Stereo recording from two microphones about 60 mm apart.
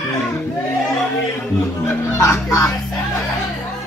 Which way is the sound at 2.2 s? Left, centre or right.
Left.